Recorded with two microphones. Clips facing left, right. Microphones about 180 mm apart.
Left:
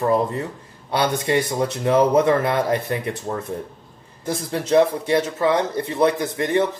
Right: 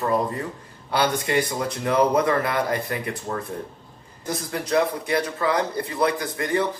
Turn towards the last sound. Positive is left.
turn(degrees=25)  # may be behind; listen again after turning